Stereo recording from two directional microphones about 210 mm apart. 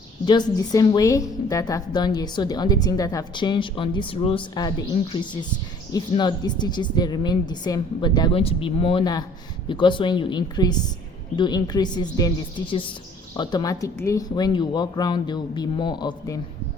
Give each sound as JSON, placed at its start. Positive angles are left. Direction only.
{"t": 0.3, "sound": "a woman's voice", "side_deg": 20}
{"t": 13.3, "sound": "a woman's voice", "side_deg": 20}